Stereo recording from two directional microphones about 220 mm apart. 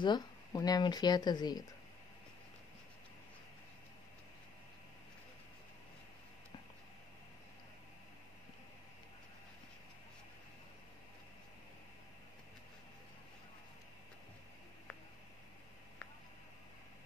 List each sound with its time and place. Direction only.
0.0 s speech: 20° left (ahead or behind)